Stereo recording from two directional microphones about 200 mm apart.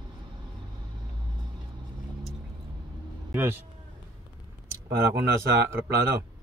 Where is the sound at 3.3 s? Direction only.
10° right (ahead or behind).